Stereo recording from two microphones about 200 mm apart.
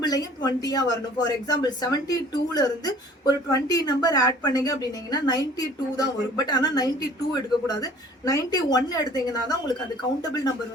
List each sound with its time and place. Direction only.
0.0 s speech: 20° left (ahead or behind)